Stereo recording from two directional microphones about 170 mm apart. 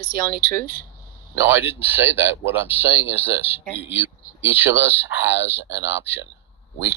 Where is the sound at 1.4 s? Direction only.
90° left.